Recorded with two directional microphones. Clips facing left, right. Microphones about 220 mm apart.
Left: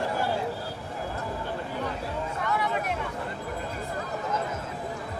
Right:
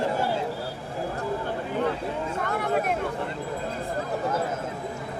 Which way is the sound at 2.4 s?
50° right (ahead or behind).